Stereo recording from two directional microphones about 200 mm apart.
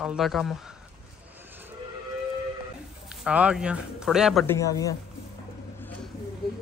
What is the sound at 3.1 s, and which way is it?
A man's voice, 5° right (ahead or behind).